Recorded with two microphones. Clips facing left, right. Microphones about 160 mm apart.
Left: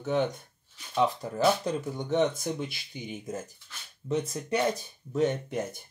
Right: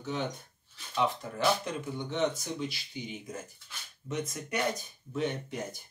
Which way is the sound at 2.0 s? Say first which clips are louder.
Left 4 dB; 50° left (ahead or behind).